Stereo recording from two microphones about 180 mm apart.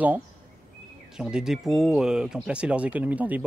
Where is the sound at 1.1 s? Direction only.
5° right (ahead or behind).